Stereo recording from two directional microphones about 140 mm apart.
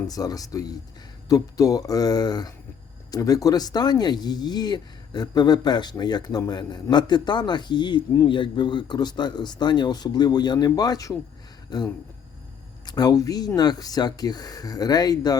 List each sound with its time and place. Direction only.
0.1 s speech: 25° left (ahead or behind)